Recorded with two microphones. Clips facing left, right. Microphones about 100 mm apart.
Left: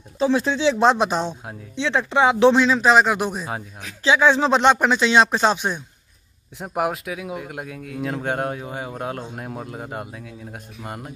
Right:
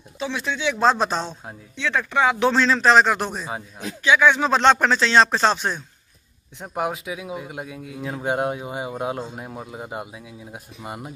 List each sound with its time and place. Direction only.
0.2 s speech: 35° left (ahead or behind); by 1.6 s 10° left (ahead or behind)
1.8 s speech: 25° left (ahead or behind)
2.5 s speech: 10° left (ahead or behind)
4.0 s speech: 30° left (ahead or behind)
4.6 s speech: 10° left (ahead or behind); by 8.3 s 5° right (ahead or behind)
8.3 s speech: 15° right (ahead or behind)
9.3 s speech: centre (ahead or behind)